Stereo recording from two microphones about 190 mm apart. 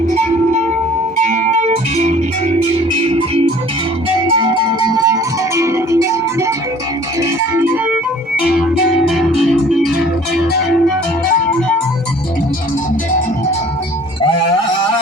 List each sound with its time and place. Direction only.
1.3 s music: 40° right (ahead or behind)
4.4 s music: 20° right (ahead or behind)
9.0 s music: centre (ahead or behind)